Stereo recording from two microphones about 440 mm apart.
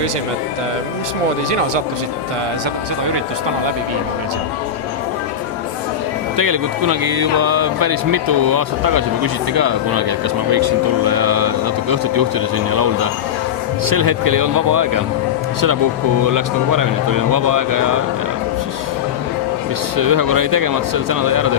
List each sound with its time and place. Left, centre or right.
6.3 s speech: right
16.2 s speech: right
20.0 s speech: right